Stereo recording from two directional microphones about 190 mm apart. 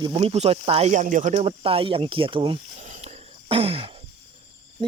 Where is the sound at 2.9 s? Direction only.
35° right (ahead or behind).